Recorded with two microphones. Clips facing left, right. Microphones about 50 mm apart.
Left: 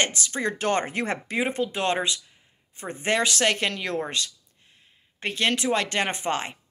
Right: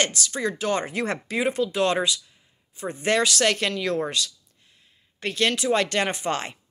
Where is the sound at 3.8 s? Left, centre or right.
Left.